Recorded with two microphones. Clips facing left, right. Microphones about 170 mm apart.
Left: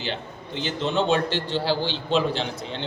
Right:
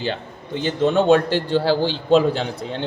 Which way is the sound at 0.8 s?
50° right (ahead or behind).